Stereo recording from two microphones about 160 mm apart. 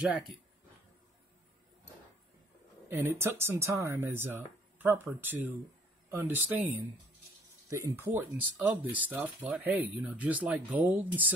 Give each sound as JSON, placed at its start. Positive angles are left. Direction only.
{"t": 2.9, "sound": "speech", "side_deg": -15}
{"t": 6.0, "sound": "a sound", "side_deg": -15}
{"t": 6.5, "sound": "speech", "side_deg": -15}